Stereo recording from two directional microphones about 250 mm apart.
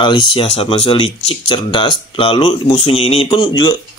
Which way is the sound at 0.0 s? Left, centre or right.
Centre.